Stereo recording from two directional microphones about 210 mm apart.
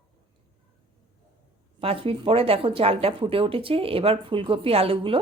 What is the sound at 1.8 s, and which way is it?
Speech, 25° right (ahead or behind).